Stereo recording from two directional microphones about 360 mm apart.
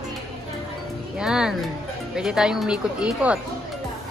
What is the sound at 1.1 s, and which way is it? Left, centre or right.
Speech, centre.